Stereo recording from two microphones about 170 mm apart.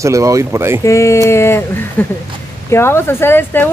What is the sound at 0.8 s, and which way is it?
Speech, 15° left (ahead or behind).